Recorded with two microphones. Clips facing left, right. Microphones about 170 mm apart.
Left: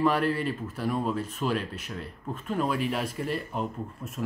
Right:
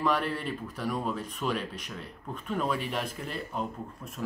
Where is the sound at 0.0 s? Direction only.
5° left (ahead or behind).